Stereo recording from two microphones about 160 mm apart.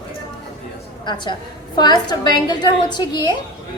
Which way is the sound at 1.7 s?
25° left (ahead or behind).